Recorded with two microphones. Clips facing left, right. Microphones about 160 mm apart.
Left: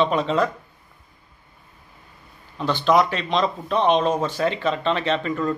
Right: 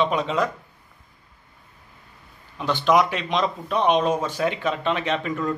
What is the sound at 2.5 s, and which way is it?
Speech, 15° right (ahead or behind).